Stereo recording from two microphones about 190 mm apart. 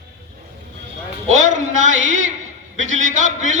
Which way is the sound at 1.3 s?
40° right (ahead or behind).